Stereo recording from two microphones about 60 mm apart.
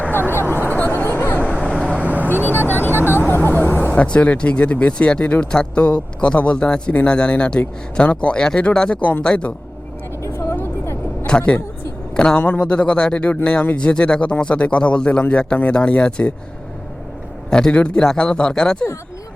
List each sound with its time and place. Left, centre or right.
0.0 s a sound: left
2.0 s vehicle: right
2.6 s a sound: left
3.1 s vehicle: left
4.0 s speech: centre
10.2 s vehicle: left
11.3 s a man's voice: centre
17.5 s speech: centre